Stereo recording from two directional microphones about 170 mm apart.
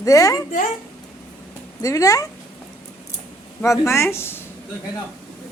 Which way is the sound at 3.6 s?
15° left (ahead or behind).